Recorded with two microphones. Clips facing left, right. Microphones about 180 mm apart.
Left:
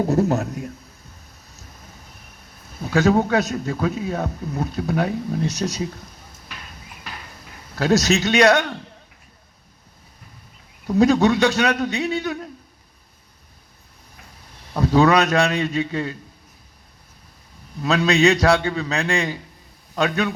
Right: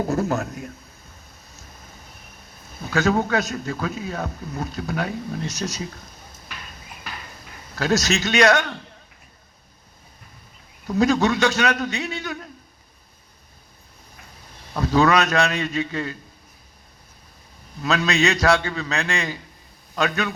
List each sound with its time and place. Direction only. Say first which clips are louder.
0.0 s a man's voice: left 4 dB; 35° left (ahead or behind)
2.9 s a man's voice: left 3 dB; 30° left (ahead or behind)
7.8 s a man's voice: left 4 dB; 30° left (ahead or behind)
10.8 s a man's voice: left 3 dB; 30° left (ahead or behind)
14.7 s a sound: left 4 dB; 25° left (ahead or behind)
15.0 s a man's voice: left 1 dB; 30° left (ahead or behind)
17.8 s a man's voice: left 4 dB; 30° left (ahead or behind)